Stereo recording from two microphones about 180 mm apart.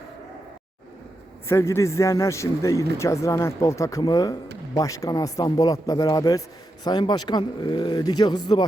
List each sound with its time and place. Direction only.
1.5 s a man's voice: 15° left (ahead or behind)